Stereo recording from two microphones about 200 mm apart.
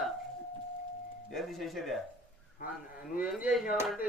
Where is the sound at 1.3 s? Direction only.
Centre (ahead or behind).